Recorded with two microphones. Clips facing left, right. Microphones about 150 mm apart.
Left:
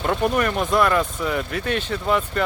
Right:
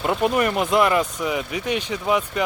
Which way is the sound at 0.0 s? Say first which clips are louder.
Right 1 dB; 5° right (ahead or behind).